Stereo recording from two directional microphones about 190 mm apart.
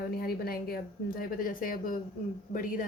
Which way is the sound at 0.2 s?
55° left (ahead or behind).